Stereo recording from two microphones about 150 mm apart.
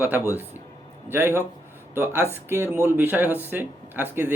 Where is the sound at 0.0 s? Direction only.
15° right (ahead or behind).